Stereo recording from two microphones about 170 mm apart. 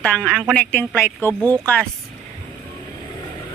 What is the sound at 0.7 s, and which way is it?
Speech, 10° left (ahead or behind).